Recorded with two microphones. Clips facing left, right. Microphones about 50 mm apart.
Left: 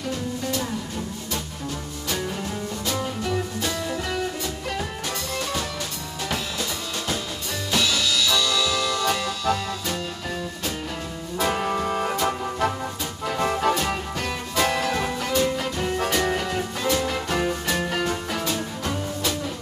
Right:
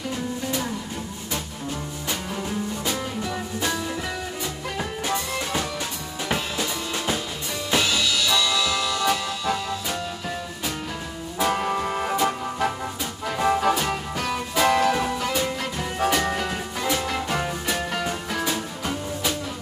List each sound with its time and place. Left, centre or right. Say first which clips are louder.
5.0 s music: right 2 dB; right
11.3 s music: even; centre